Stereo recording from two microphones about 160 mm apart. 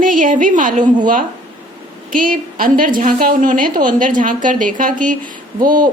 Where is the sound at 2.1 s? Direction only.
60° right (ahead or behind).